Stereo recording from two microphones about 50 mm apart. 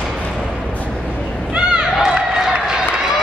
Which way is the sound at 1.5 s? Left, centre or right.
Centre.